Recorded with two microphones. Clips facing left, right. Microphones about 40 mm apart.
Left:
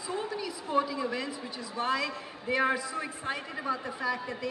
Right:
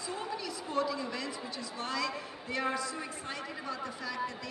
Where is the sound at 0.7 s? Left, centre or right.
Centre.